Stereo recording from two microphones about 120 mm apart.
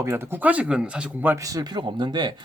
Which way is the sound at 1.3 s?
30° right (ahead or behind).